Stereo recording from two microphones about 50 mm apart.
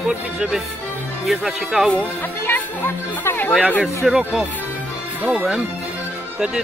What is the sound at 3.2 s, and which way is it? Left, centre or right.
Speech, left.